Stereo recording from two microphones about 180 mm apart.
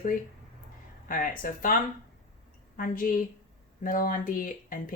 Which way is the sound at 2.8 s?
50° left (ahead or behind).